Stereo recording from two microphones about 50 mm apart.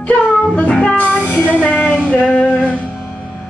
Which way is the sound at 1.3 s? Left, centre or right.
Left.